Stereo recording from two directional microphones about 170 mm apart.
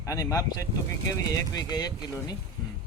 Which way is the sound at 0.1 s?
20° left (ahead or behind).